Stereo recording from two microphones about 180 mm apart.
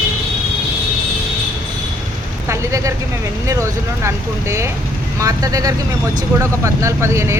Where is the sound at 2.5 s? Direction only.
15° right (ahead or behind).